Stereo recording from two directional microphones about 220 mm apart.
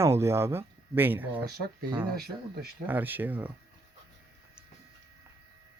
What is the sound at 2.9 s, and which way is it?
Speech, 10° right (ahead or behind).